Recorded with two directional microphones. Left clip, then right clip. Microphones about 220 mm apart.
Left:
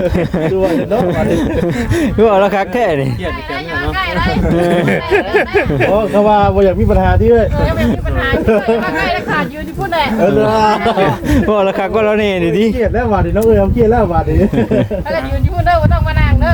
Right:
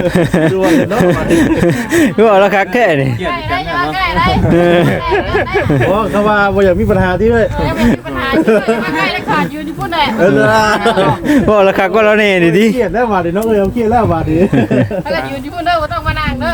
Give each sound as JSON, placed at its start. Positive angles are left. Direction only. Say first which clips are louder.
{"t": 0.1, "sound": "speech", "louder": "right 3 dB", "side_deg": -20}
{"t": 4.5, "sound": "speech", "louder": "right 4 dB", "side_deg": -15}
{"t": 4.9, "sound": "speech", "louder": "left 1 dB", "side_deg": 45}
{"t": 6.1, "sound": "speech", "louder": "left 2 dB", "side_deg": -55}
{"t": 11.3, "sound": "speech", "louder": "right 4 dB", "side_deg": -15}